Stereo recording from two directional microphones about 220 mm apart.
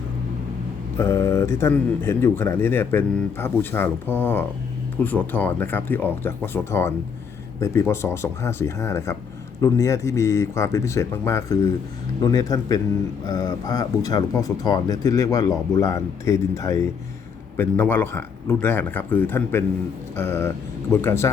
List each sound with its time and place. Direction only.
0.9 s speech: 10° left (ahead or behind)